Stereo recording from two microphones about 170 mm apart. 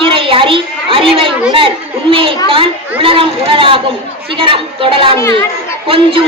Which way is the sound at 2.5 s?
30° right (ahead or behind).